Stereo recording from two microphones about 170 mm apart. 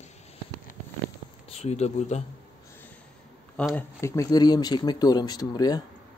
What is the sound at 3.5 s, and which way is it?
Speech, 10° left (ahead or behind).